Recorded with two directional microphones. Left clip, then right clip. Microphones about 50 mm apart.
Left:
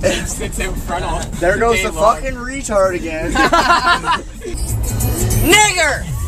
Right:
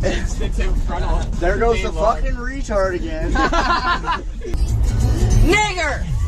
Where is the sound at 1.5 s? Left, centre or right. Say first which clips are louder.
Left 4 dB; left.